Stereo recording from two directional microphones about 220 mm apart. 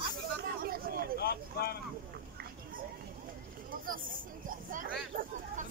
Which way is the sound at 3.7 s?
40° right (ahead or behind).